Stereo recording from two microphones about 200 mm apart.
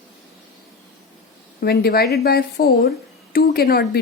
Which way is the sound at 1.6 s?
50° left (ahead or behind).